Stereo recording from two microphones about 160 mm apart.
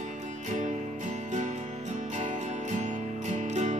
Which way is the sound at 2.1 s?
50° right (ahead or behind).